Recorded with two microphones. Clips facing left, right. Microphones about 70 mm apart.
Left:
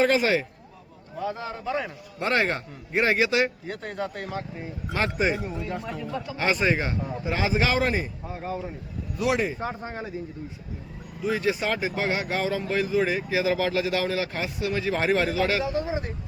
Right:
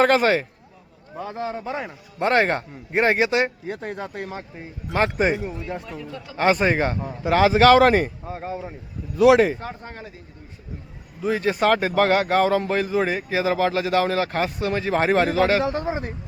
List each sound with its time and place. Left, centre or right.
0.0 s a man's voice: right
1.5 s a man's voice: right
2.2 s speech: right
4.9 s speech: right
6.0 s speech: centre
6.3 s speech: right
7.3 s speech: right
8.3 s a man's voice: right
9.6 s speech: centre
11.2 s speech: right
11.7 s speech: right